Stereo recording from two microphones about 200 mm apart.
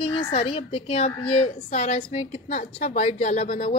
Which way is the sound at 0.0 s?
30° left (ahead or behind).